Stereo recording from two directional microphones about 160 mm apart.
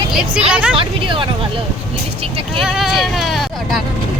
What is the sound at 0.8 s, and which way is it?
Speech, 30° right (ahead or behind).